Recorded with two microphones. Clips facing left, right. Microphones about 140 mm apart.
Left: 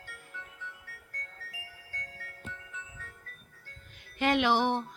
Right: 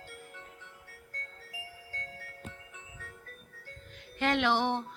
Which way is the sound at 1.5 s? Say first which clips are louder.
Right 3 dB; 25° right (ahead or behind).